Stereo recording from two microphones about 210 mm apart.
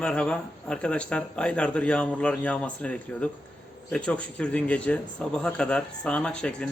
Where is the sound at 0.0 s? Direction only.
5° left (ahead or behind).